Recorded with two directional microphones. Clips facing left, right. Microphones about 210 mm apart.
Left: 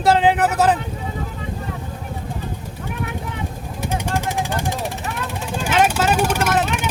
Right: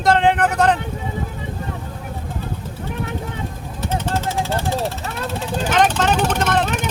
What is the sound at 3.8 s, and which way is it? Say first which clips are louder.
Vehicle: right 1 dB; 10° left (ahead or behind).